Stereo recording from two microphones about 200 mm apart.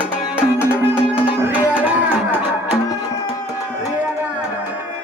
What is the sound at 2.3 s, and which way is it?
Music, 5° right (ahead or behind).